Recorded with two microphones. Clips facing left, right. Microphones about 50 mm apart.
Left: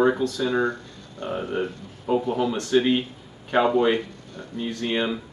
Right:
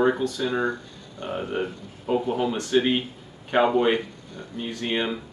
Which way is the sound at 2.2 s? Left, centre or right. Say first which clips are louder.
Left 1 dB; right.